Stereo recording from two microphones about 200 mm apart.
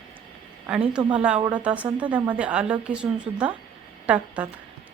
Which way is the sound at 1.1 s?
5° right (ahead or behind).